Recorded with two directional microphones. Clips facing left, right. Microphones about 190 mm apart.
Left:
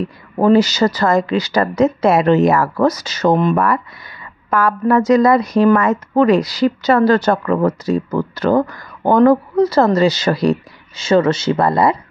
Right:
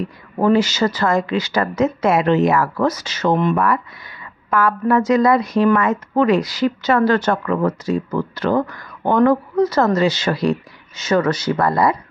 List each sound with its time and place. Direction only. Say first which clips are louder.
0.4 s a woman's voice: left 3 dB; 35° left (ahead or behind)
11.0 s speech: left 4 dB; 25° left (ahead or behind)